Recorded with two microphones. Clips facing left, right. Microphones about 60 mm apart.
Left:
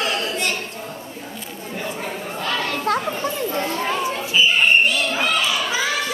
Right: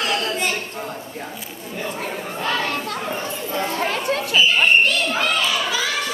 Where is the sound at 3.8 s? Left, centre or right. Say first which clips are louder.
Right 1 dB; right.